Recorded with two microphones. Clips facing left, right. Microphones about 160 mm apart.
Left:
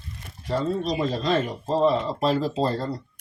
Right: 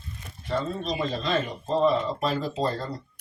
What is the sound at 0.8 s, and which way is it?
Speech, 35° left (ahead or behind).